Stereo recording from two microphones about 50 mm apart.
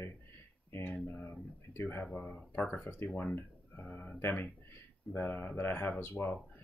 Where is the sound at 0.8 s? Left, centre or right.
Left.